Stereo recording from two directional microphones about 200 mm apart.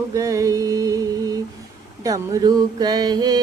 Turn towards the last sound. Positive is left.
turn(degrees=-20)  # may be behind; listen again after turning